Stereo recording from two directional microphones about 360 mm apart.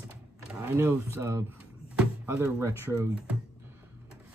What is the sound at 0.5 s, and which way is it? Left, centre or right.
Speech, centre.